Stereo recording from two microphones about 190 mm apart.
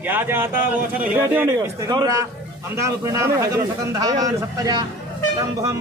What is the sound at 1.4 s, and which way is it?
Speech, 15° right (ahead or behind).